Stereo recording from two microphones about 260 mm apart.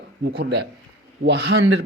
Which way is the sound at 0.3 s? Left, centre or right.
Right.